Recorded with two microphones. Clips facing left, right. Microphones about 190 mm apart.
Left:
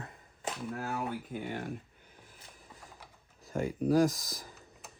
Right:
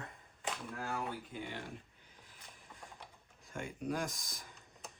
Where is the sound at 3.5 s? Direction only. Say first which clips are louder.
Left 10 dB; 35° left (ahead or behind).